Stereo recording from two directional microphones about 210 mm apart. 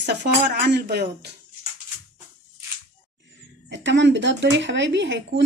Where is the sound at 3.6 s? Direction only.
60° right (ahead or behind).